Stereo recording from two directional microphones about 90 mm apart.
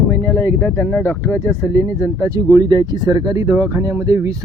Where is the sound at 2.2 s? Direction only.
40° right (ahead or behind).